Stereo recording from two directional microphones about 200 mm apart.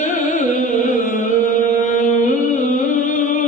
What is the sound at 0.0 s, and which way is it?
Music, 40° left (ahead or behind).